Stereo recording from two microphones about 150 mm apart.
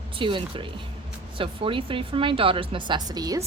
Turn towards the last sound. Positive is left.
turn(degrees=-25)  # may be behind; listen again after turning